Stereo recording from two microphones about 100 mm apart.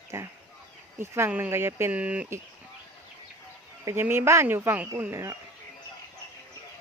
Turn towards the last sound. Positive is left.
turn(degrees=-30)  # may be behind; listen again after turning